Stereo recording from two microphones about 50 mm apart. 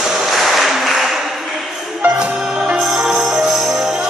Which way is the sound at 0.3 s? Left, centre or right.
Centre.